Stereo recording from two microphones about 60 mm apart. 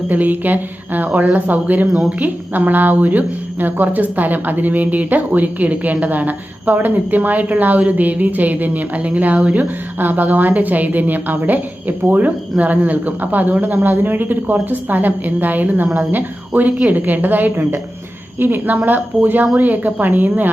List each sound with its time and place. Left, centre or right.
0.1 s a woman's voice: right